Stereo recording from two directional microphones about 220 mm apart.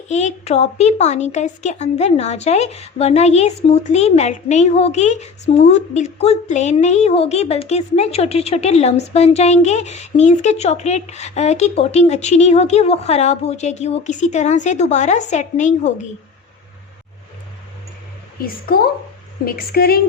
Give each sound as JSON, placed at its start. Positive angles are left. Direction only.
{"t": 0.1, "sound": "a woman's voice", "side_deg": 30}
{"t": 18.4, "sound": "a woman's voice", "side_deg": 40}